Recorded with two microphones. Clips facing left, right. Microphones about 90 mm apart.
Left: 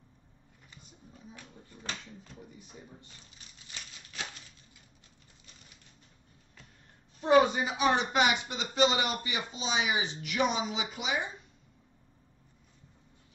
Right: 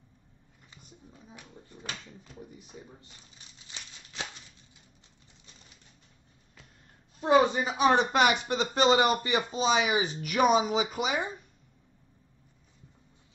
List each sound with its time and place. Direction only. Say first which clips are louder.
1.3 s a sound: right 5 dB; 15° right (ahead or behind)
7.2 s a woman's voice: right 1 dB; 30° right (ahead or behind)
7.6 s speech: right 4 dB; 40° right (ahead or behind)